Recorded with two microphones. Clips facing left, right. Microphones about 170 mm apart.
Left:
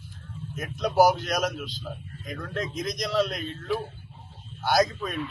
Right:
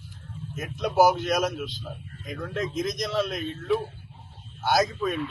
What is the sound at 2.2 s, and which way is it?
Speech, 5° right (ahead or behind).